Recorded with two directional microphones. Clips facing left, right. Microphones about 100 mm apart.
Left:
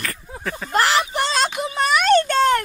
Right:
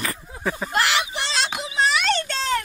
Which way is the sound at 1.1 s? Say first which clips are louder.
Left 5 dB; 45° left (ahead or behind).